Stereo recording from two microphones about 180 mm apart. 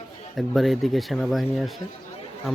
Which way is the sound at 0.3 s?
Centre (ahead or behind).